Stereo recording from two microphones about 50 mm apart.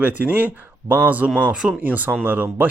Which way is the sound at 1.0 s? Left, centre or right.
Right.